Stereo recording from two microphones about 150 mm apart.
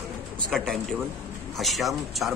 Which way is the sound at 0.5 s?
Centre (ahead or behind).